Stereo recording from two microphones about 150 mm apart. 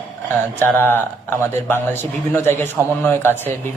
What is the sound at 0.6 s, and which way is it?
A man's voice, 15° left (ahead or behind).